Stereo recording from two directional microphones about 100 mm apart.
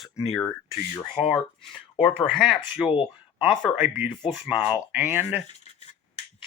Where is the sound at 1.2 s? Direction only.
90° left.